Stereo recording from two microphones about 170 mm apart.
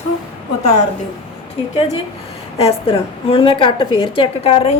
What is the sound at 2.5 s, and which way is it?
A woman's voice, 35° left (ahead or behind).